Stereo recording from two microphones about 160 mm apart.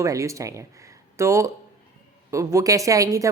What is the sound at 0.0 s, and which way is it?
Speech, 20° right (ahead or behind).